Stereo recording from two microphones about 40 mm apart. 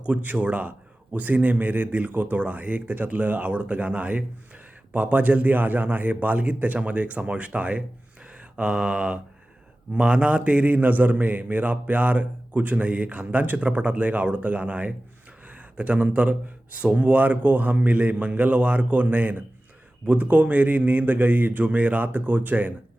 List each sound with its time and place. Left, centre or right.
0.0 s a man's voice: right
8.5 s mantra: right
9.9 s a man's voice: right
13.6 s a man's voice: right